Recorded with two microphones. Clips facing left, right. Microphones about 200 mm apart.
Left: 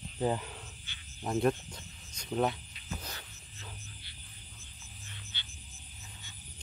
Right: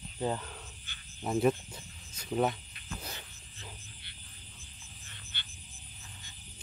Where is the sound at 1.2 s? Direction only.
5° right (ahead or behind).